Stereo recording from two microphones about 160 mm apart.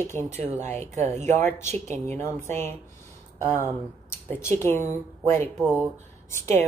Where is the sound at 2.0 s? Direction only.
15° left (ahead or behind).